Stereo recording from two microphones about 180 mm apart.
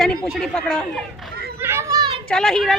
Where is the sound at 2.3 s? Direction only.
Centre (ahead or behind).